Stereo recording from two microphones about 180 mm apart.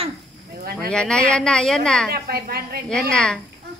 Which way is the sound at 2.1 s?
60° right (ahead or behind).